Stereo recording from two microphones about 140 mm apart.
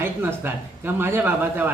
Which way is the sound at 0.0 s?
15° right (ahead or behind).